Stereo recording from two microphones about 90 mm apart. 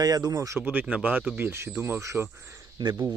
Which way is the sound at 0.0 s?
45° right (ahead or behind).